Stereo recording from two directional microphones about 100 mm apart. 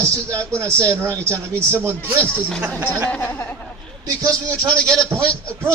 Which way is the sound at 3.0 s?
15° left (ahead or behind).